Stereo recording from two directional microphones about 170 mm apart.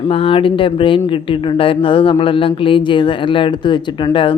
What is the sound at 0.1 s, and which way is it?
Speech, 35° left (ahead or behind).